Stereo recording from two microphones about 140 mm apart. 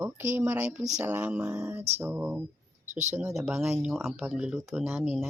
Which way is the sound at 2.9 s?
55° right (ahead or behind).